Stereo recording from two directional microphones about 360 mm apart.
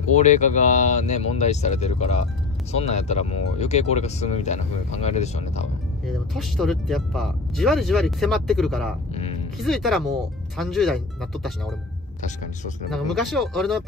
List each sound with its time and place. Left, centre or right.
0.1 s speech: centre
6.0 s speech: centre
9.1 s music: centre
9.6 s speech: centre
12.9 s speech: centre